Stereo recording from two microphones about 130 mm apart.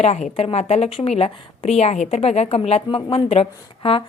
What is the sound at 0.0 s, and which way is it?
A woman's voice, 55° left (ahead or behind).